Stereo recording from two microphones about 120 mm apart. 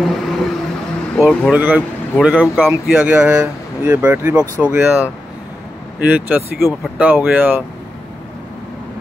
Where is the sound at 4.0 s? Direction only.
15° right (ahead or behind).